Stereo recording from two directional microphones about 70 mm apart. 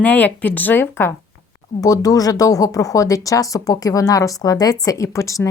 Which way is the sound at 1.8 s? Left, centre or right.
Left.